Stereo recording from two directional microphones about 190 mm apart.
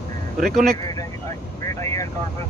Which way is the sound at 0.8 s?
20° left (ahead or behind).